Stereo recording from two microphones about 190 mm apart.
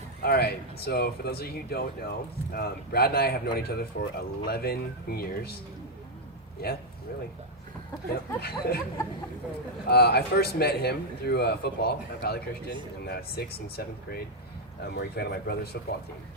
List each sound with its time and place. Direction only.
0.2 s speech: 55° left (ahead or behind)
6.6 s speech: 55° left (ahead or behind)
8.4 s speech: 55° left (ahead or behind)
9.9 s speech: 60° left (ahead or behind)